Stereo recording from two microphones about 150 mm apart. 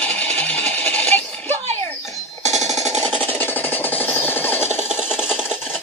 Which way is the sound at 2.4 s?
50° right (ahead or behind).